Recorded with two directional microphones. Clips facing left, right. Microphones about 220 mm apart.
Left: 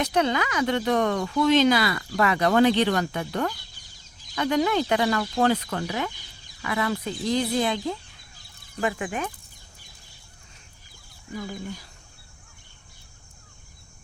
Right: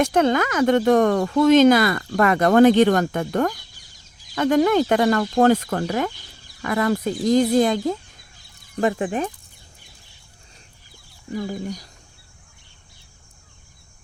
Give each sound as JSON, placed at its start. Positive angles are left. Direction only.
{"t": 0.0, "sound": "speech", "side_deg": -50}
{"t": 11.3, "sound": "speech", "side_deg": -40}